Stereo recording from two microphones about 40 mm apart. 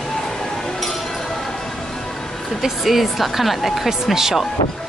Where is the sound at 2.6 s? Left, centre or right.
Centre.